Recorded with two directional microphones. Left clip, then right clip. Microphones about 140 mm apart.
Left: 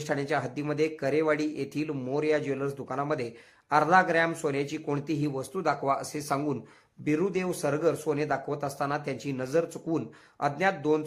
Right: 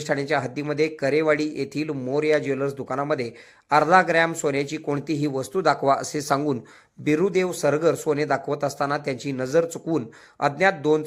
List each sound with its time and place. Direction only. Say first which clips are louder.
0.0 s speech: right 5 dB; 20° right (ahead or behind)